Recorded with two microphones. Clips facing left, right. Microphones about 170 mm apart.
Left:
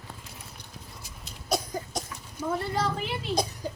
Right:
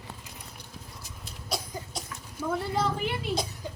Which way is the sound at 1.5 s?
45° left (ahead or behind).